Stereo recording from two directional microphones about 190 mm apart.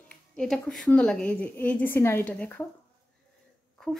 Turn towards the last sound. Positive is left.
turn(degrees=5)  # may be behind; listen again after turning